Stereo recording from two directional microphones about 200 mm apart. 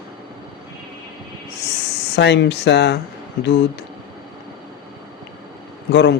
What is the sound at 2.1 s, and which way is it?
Speech, 60° left (ahead or behind).